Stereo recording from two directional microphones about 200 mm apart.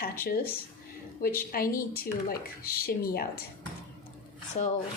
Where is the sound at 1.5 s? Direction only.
45° left (ahead or behind).